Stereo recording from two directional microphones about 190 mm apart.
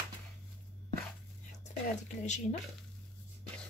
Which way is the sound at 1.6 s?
40° left (ahead or behind).